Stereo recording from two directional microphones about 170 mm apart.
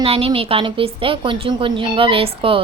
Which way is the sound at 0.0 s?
35° right (ahead or behind).